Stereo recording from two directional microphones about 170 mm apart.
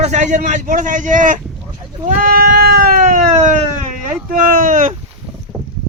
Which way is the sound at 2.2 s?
60° right (ahead or behind).